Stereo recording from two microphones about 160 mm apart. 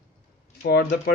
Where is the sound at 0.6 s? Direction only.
80° left.